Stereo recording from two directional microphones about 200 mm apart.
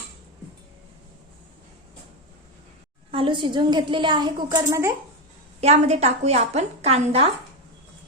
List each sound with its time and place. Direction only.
3.1 s a woman's voice: 25° right (ahead or behind)
5.5 s a woman's voice: 35° right (ahead or behind)